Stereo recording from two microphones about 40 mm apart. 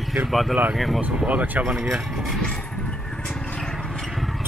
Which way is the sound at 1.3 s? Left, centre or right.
Right.